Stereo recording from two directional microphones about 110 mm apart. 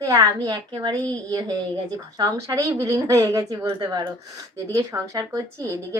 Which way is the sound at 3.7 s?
40° right (ahead or behind).